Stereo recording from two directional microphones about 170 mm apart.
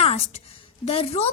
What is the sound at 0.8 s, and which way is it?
Speech, 35° left (ahead or behind).